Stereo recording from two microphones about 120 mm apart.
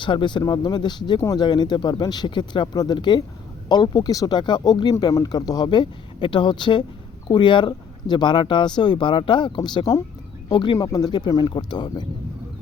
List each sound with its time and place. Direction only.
0.0 s speech: 40° left (ahead or behind)